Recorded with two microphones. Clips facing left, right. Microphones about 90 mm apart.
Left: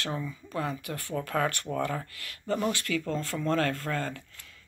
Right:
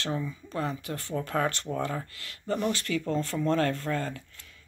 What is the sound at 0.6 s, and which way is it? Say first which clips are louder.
Speech: right 1 dB; 25° right (ahead or behind).